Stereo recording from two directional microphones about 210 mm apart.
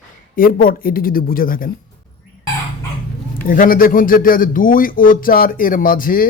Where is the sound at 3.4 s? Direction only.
40° left (ahead or behind).